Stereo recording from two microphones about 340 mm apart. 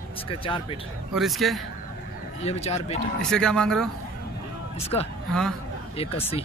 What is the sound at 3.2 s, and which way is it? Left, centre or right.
Speech, centre.